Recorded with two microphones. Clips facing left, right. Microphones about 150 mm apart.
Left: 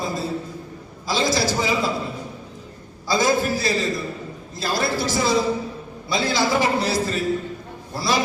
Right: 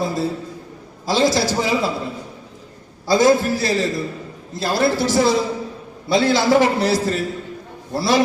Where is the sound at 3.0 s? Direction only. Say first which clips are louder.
Right 5 dB; 70° right (ahead or behind).